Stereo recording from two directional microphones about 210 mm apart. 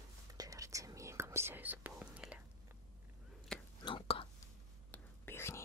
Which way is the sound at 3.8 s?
25° left (ahead or behind).